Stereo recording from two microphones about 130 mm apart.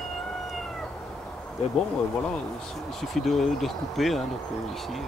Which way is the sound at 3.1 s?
Centre (ahead or behind).